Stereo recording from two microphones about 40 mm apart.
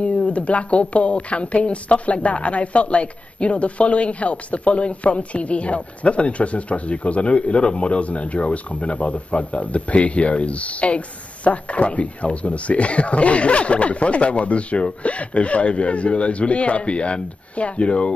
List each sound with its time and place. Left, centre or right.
0.0 s speech: left